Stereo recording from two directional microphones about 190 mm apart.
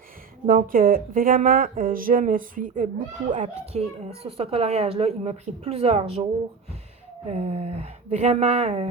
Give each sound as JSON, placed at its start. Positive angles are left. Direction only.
{"t": 0.4, "sound": "speech", "side_deg": -45}
{"t": 7.3, "sound": "speech", "side_deg": -35}